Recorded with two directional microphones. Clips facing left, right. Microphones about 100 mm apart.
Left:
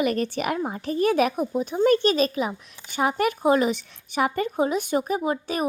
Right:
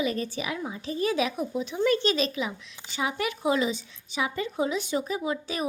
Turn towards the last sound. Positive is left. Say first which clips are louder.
# left 4 dB
turn(degrees=45)  # may be behind; listen again after turning